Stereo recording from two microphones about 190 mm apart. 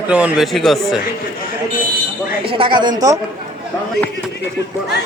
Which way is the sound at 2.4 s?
25° right (ahead or behind).